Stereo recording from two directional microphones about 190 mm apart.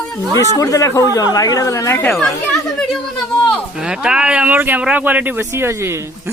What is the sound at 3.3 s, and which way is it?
Speech, 5° left (ahead or behind).